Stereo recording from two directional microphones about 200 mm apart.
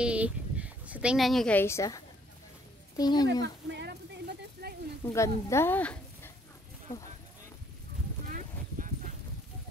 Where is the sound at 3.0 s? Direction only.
20° left (ahead or behind).